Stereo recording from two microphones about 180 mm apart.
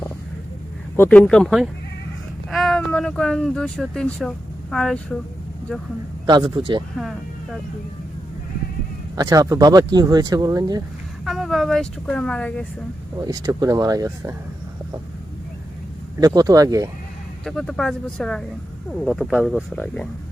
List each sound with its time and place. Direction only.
0.9 s speech: 10° left (ahead or behind)
6.2 s speech: 25° right (ahead or behind)
6.9 s speech: centre (ahead or behind)
9.1 s speech: 20° right (ahead or behind)
11.3 s speech: centre (ahead or behind)
13.1 s speech: 20° right (ahead or behind)
16.1 s speech: 20° right (ahead or behind)
17.4 s speech: centre (ahead or behind)
19.7 s speech: 5° left (ahead or behind)